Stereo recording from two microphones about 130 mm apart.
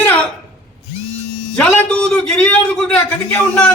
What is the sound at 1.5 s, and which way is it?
A man's voice, 10° left (ahead or behind).